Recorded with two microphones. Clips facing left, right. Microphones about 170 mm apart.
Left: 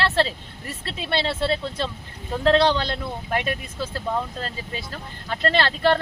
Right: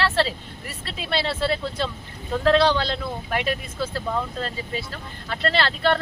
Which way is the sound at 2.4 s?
20° left (ahead or behind).